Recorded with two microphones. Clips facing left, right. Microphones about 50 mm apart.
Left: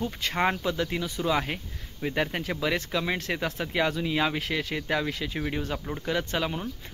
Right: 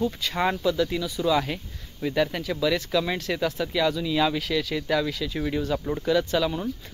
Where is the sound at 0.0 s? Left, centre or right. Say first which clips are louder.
Right 2 dB; left.